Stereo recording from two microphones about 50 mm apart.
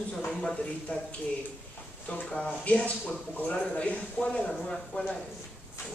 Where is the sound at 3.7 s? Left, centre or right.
Left.